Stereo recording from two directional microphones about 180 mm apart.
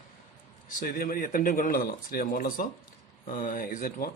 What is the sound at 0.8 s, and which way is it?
Speech, 50° left (ahead or behind).